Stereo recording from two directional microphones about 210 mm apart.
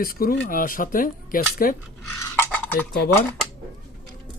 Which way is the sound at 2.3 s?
10° left (ahead or behind).